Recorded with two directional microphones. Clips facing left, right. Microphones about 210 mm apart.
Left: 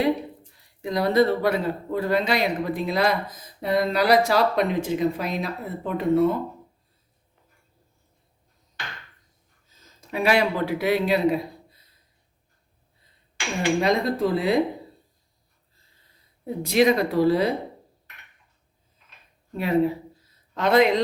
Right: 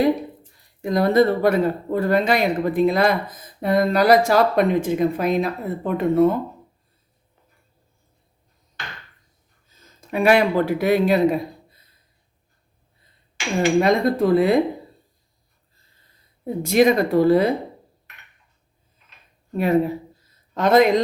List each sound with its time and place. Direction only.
0.8 s speech: 50° right (ahead or behind)
10.1 s speech: 50° right (ahead or behind)
13.6 s speech: 50° right (ahead or behind)
16.4 s speech: 50° right (ahead or behind)
19.5 s speech: 50° right (ahead or behind)